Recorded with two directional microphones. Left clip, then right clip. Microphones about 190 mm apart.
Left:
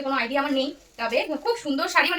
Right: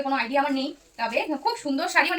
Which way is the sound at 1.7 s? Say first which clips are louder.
Left 1 dB; 20° left (ahead or behind).